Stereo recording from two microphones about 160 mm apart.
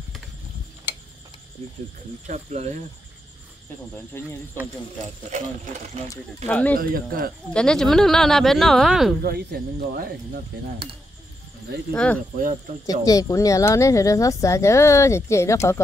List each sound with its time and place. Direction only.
2.2 s speech: 45° right (ahead or behind)
4.1 s speech: 15° left (ahead or behind)
6.0 s speech: 10° left (ahead or behind)
6.8 s speech: 65° right (ahead or behind)
7.5 s speech: 5° left (ahead or behind)
9.2 s speech: 85° right
11.9 s speech: 5° left (ahead or behind)
12.8 s speech: 20° left (ahead or behind)